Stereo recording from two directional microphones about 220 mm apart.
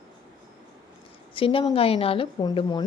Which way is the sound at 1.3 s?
25° left (ahead or behind).